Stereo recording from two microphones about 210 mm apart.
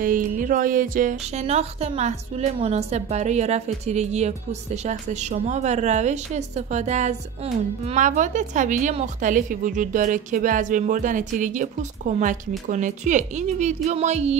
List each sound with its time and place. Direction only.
0.0 s a woman's voice: 40° right (ahead or behind)
1.4 s a woman's voice: 30° right (ahead or behind)